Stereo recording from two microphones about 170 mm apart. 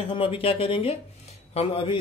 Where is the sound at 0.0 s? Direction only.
30° left (ahead or behind).